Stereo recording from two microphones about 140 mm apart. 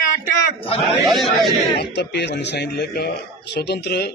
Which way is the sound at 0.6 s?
40° left (ahead or behind).